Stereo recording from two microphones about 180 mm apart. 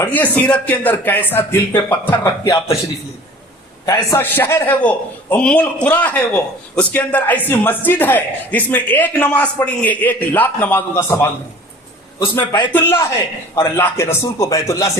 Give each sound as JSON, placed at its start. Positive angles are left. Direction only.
{"t": 0.0, "sound": "a man's voice", "side_deg": 10}
{"t": 3.8, "sound": "a man's voice", "side_deg": 20}